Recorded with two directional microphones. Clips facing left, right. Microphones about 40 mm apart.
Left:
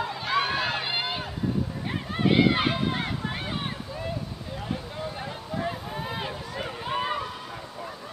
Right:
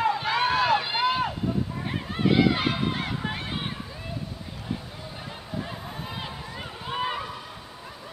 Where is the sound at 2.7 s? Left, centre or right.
Centre.